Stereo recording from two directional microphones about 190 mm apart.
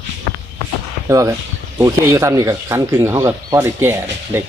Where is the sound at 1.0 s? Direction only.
15° right (ahead or behind).